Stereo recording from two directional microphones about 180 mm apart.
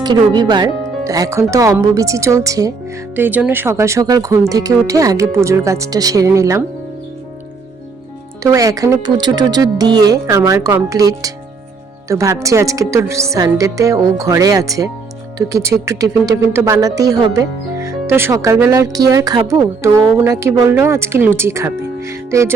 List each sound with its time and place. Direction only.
0.0 s speech: 25° right (ahead or behind)
8.4 s speech: 20° right (ahead or behind)